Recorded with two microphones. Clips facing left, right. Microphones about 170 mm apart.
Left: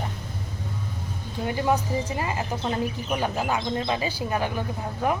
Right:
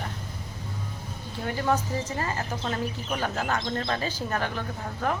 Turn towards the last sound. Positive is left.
turn(degrees=15)  # may be behind; listen again after turning